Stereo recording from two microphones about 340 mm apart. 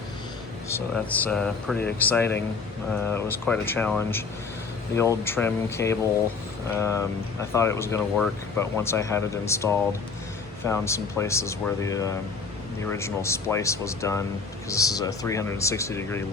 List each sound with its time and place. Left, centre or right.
0.7 s speech: centre